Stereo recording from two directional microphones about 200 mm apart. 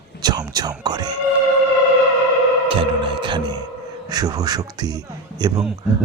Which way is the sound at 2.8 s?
25° right (ahead or behind).